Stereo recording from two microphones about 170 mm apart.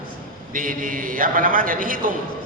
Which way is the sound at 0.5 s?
55° right (ahead or behind).